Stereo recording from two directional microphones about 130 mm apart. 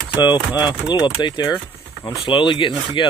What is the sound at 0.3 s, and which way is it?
Speech, 15° right (ahead or behind).